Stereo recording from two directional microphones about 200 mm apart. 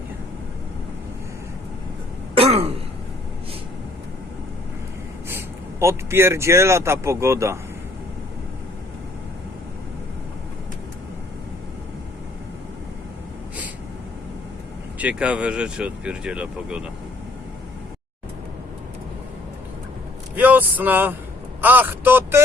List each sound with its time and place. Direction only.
2.3 s throat clearing: 30° right (ahead or behind)
5.8 s speech: 15° right (ahead or behind)
14.9 s speech: 5° right (ahead or behind)
20.3 s speech: 10° right (ahead or behind)